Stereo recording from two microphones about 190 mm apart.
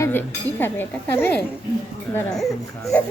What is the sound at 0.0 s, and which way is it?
Speech, 10° left (ahead or behind).